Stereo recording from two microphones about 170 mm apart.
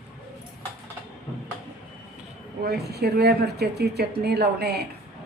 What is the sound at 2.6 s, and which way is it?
Speech, 70° right (ahead or behind).